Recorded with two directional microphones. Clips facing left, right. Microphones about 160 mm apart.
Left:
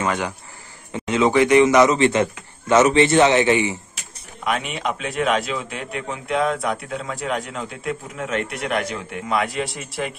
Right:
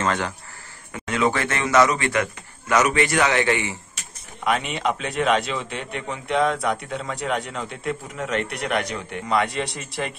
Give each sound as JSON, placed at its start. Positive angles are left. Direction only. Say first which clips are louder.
{"t": 0.0, "sound": "a man's voice", "louder": "left 1 dB", "side_deg": 10}
{"t": 4.5, "sound": "a man's voice", "louder": "right 1 dB", "side_deg": 0}